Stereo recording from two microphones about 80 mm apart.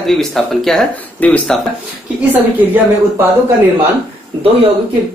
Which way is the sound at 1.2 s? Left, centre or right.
Centre.